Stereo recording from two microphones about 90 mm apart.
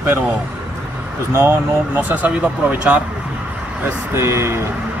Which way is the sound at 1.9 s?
20° right (ahead or behind).